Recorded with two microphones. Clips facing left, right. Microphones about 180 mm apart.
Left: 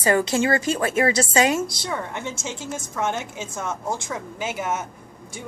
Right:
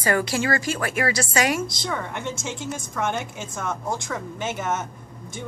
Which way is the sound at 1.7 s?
5° left (ahead or behind).